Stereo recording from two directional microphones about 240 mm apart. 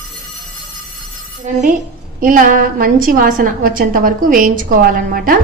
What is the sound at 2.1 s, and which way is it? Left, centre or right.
A woman's voice, right.